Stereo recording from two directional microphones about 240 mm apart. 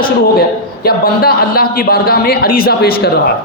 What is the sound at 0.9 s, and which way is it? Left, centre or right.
A man's voice, left.